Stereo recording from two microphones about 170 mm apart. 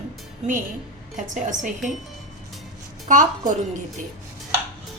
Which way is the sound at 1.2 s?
50° right (ahead or behind).